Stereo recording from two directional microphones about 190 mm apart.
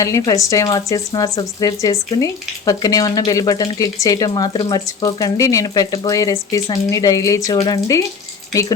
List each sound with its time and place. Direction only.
0.0 s speech: 15° left (ahead or behind)